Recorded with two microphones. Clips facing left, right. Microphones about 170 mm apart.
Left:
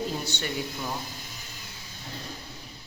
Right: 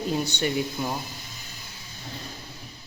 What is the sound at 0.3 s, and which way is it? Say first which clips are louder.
Speech: right 6 dB; 15° right (ahead or behind).